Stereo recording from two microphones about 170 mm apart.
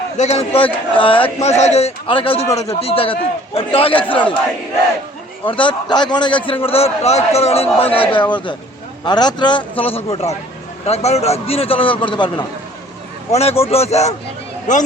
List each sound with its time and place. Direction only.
0.2 s a man's voice: 40° left (ahead or behind)
5.5 s a man's voice: 30° left (ahead or behind); by 14.8 s 45° left (ahead or behind)